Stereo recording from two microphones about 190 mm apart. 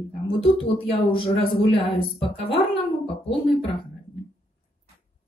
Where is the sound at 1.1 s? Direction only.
30° left (ahead or behind).